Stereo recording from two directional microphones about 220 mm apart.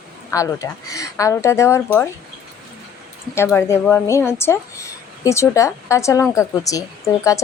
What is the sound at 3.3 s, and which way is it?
A woman's voice, 10° left (ahead or behind).